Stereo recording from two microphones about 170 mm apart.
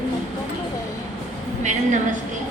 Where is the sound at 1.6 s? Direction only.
45° right (ahead or behind).